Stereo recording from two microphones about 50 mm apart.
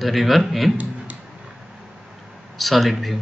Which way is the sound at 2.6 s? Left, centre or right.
Centre.